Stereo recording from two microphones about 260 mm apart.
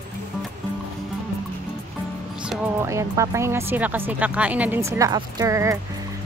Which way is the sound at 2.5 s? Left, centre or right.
Centre.